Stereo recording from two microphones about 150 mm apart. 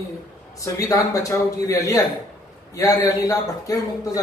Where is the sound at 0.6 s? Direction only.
25° left (ahead or behind).